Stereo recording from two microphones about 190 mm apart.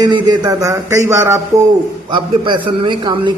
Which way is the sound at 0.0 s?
20° right (ahead or behind).